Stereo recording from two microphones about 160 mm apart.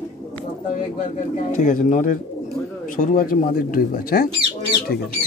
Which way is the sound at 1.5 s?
55° left (ahead or behind).